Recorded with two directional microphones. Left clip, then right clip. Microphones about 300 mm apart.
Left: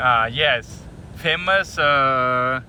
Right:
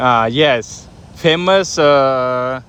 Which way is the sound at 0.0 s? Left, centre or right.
Centre.